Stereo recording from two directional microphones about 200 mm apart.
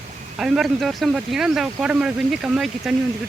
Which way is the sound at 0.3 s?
Centre (ahead or behind).